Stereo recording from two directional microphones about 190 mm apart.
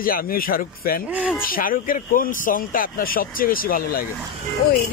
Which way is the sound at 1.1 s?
5° right (ahead or behind).